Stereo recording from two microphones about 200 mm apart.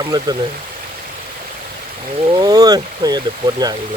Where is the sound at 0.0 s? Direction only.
20° right (ahead or behind).